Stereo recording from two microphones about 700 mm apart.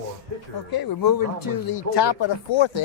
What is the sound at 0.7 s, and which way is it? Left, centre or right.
Speech, left.